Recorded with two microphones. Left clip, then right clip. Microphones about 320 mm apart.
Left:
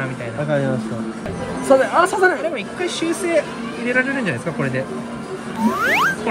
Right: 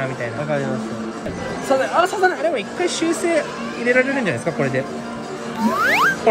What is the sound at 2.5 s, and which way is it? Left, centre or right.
Speech, centre.